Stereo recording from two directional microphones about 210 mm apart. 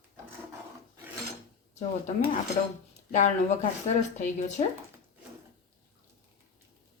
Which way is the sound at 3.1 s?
35° left (ahead or behind).